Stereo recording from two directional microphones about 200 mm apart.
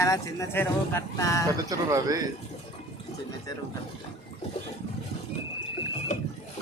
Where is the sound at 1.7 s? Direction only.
15° right (ahead or behind).